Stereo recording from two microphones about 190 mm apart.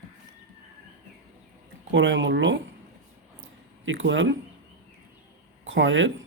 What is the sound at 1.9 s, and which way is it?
Speech, 75° right (ahead or behind).